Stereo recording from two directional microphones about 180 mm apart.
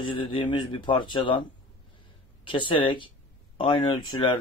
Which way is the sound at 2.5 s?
30° left (ahead or behind).